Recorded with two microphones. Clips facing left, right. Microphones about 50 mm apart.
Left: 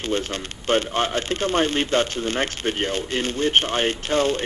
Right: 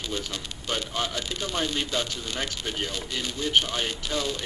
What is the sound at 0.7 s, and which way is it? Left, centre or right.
Speech, left.